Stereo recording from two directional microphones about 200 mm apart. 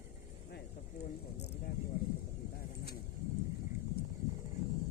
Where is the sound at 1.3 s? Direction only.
60° left (ahead or behind).